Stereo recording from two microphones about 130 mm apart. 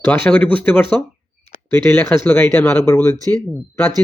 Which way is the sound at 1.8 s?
15° left (ahead or behind).